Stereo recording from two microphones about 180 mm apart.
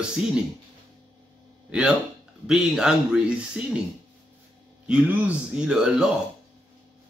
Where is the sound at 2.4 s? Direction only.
5° right (ahead or behind).